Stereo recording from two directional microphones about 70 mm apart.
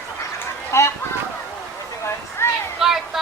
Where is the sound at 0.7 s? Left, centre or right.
Left.